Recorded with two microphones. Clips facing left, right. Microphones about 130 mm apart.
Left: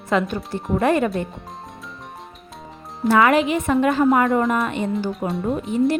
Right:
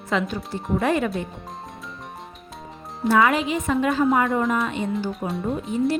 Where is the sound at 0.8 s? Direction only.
55° left (ahead or behind).